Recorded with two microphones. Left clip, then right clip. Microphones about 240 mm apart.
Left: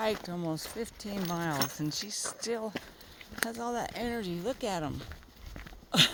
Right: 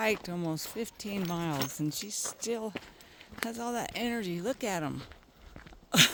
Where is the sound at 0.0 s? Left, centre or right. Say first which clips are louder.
Right 1 dB; right.